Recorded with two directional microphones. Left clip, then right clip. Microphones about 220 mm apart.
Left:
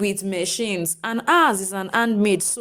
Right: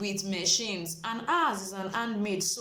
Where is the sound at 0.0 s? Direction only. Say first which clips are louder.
Left 8 dB; 40° left (ahead or behind).